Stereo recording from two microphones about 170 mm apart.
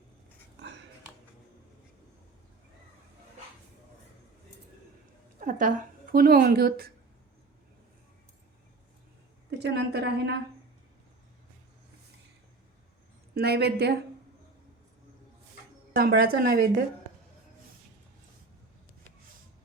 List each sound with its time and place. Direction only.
0.6 s a sound: 90° right
5.4 s a woman's voice: 55° right (ahead or behind)
9.5 s a woman's voice: 80° right
13.3 s a woman's voice: 70° right (ahead or behind)
16.0 s speech: 65° right (ahead or behind)